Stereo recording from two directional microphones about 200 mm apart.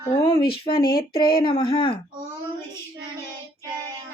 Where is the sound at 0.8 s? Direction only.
45° left (ahead or behind).